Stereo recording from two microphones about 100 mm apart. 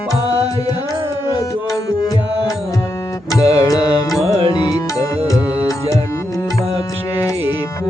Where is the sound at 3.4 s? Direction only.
40° left (ahead or behind).